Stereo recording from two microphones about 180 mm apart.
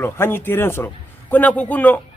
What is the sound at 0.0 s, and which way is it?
Speech, 10° left (ahead or behind).